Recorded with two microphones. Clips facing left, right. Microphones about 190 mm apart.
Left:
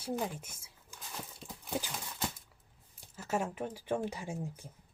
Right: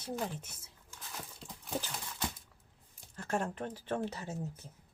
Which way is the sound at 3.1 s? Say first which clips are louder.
Left 1 dB; 5° left (ahead or behind).